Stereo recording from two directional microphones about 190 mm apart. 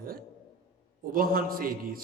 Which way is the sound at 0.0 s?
50° right (ahead or behind).